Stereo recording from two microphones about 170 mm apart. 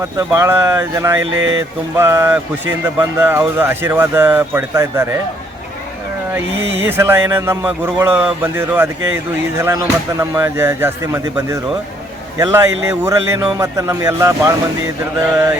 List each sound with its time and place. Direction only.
0.2 s speech: 15° right (ahead or behind)
6.3 s a man's voice: 15° right (ahead or behind)